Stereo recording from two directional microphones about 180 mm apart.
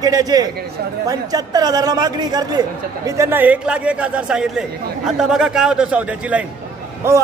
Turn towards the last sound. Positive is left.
turn(degrees=-15)  # may be behind; listen again after turning